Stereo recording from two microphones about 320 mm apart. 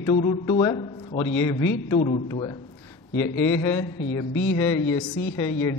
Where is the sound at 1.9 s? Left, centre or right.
Centre.